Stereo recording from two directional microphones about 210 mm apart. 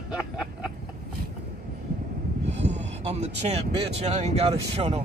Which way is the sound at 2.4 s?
35° right (ahead or behind).